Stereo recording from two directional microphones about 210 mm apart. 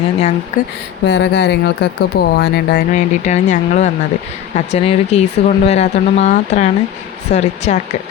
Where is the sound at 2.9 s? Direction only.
35° left (ahead or behind).